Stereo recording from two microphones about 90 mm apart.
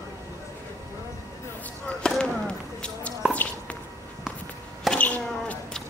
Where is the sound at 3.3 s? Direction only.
15° left (ahead or behind).